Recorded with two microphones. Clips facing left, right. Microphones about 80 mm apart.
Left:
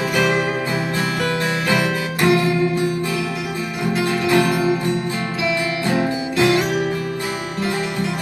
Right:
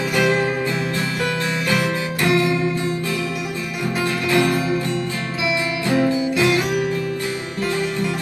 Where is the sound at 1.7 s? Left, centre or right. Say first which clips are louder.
Even; left.